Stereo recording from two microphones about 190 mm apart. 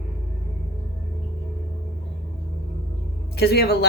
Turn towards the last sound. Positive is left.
turn(degrees=60)  # may be behind; listen again after turning